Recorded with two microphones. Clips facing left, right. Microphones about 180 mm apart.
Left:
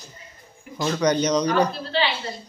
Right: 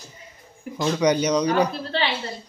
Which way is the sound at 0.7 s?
10° right (ahead or behind).